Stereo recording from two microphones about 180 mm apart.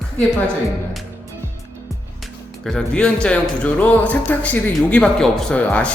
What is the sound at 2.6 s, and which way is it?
Speech, 5° left (ahead or behind).